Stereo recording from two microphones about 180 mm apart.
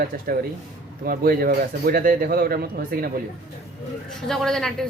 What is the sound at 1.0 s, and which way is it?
Speech, 55° right (ahead or behind).